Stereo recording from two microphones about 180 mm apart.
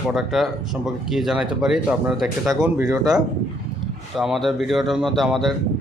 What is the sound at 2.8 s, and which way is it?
Speech, 20° right (ahead or behind).